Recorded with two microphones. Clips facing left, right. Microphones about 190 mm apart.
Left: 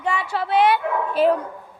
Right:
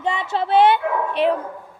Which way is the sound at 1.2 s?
Centre (ahead or behind).